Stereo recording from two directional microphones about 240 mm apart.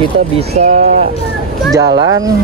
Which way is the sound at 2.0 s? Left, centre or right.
Centre.